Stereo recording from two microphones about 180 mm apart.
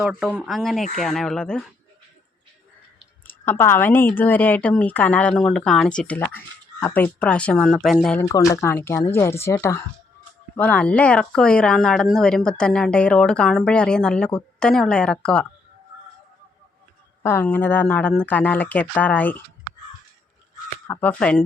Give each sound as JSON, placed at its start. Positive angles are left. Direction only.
{"t": 0.0, "sound": "speech", "side_deg": -5}
{"t": 3.2, "sound": "a woman's voice", "side_deg": 10}
{"t": 8.2, "sound": "a woman's voice", "side_deg": 20}
{"t": 17.2, "sound": "a woman's voice", "side_deg": 10}
{"t": 20.8, "sound": "a woman's voice", "side_deg": 10}